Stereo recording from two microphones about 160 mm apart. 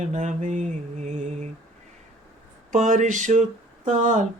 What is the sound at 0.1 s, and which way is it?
Mantra, 50° right (ahead or behind).